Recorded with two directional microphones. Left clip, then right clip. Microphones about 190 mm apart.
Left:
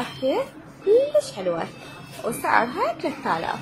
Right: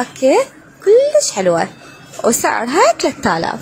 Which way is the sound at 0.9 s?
35° right (ahead or behind).